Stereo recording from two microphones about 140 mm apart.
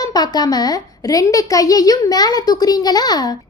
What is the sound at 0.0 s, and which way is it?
A child's voice, 30° left (ahead or behind).